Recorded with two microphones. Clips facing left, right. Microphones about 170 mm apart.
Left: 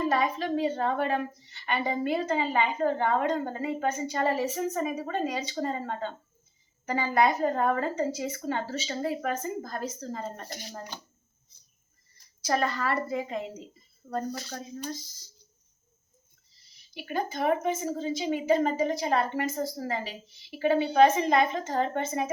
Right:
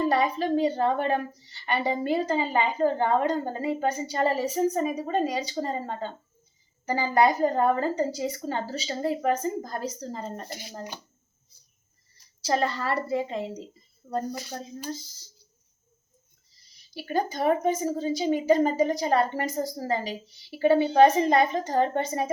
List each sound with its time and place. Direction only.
0.0 s a woman's voice: 35° right (ahead or behind)
12.4 s a woman's voice: 30° right (ahead or behind)
16.9 s a woman's voice: 35° right (ahead or behind)